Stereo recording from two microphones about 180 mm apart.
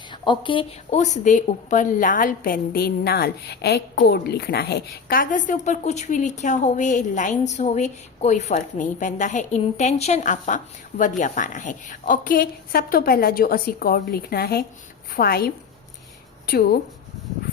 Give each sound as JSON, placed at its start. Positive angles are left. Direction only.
{"t": 0.1, "sound": "a woman's voice", "side_deg": 25}